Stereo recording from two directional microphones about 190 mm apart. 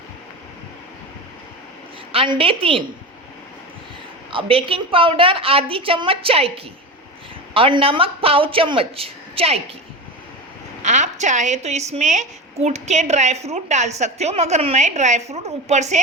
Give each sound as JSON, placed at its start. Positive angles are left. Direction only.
{"t": 2.1, "sound": "a woman's voice", "side_deg": -25}
{"t": 4.3, "sound": "a woman's voice", "side_deg": -30}
{"t": 7.5, "sound": "a woman's voice", "side_deg": -30}
{"t": 10.8, "sound": "a woman's voice", "side_deg": -40}